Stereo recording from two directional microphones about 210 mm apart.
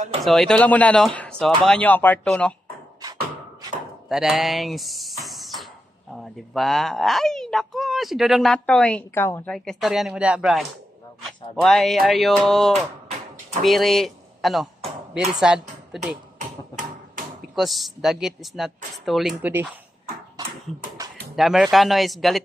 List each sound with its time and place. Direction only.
0.2 s speech: centre (ahead or behind)
4.1 s speech: centre (ahead or behind)
16.3 s a sound: 40° right (ahead or behind)
17.6 s speech: centre (ahead or behind)
21.4 s speech: centre (ahead or behind)